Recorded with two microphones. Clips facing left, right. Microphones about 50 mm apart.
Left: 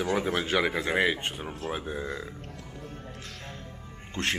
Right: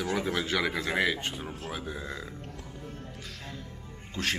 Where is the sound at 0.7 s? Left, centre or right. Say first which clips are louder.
Left 2 dB; centre.